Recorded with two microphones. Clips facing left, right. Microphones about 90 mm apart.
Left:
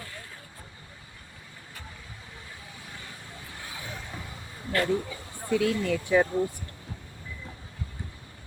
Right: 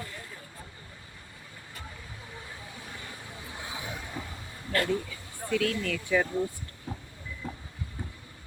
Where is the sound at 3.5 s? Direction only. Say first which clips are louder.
Right 3 dB; 20° right (ahead or behind).